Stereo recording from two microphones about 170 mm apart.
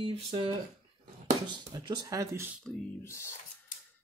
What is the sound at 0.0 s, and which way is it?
Speech, 30° right (ahead or behind).